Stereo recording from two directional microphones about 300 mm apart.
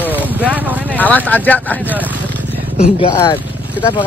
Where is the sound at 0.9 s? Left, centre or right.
Centre.